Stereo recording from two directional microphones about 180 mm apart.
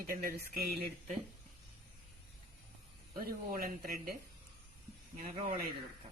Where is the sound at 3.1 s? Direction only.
55° right (ahead or behind).